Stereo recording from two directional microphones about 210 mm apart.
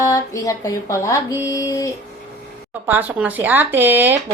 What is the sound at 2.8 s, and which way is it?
Speech, 10° right (ahead or behind).